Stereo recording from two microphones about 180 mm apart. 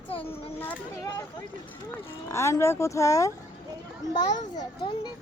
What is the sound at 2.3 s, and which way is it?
A woman's voice, 15° left (ahead or behind).